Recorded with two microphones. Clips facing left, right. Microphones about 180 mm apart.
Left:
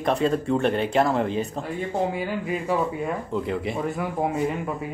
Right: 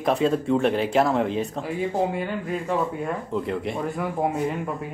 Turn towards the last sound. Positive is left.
turn(degrees=0)  # may be behind; listen again after turning